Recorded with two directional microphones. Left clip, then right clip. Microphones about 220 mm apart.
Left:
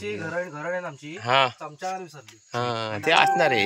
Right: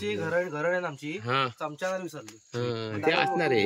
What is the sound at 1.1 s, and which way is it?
Speech, 5° right (ahead or behind).